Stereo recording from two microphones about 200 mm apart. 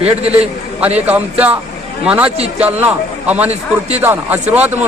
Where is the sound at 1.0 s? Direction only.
5° right (ahead or behind).